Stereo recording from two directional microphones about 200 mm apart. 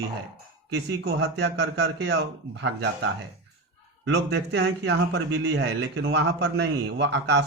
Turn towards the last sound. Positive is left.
turn(degrees=-60)  # may be behind; listen again after turning